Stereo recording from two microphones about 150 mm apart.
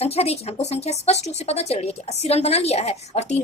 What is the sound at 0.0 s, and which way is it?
A woman's voice, 45° left (ahead or behind).